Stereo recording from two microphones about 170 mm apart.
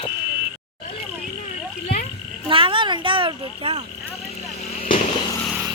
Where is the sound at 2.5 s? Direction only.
30° right (ahead or behind).